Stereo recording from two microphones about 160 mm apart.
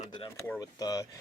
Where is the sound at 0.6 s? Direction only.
25° left (ahead or behind).